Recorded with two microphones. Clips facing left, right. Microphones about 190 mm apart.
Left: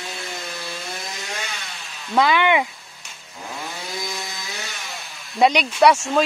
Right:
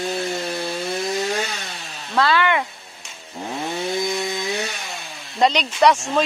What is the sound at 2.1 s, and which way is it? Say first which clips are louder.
Speech: left 1 dB; 15° left (ahead or behind).